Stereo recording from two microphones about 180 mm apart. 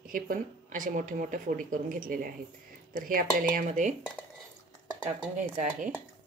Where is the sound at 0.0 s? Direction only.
50° right (ahead or behind).